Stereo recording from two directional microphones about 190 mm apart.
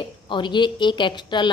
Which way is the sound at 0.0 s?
25° left (ahead or behind).